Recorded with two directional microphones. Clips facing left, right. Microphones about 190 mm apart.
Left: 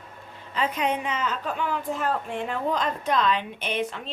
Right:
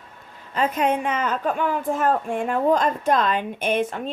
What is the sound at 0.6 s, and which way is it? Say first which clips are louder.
A woman's voice: right 5 dB; 50° right (ahead or behind).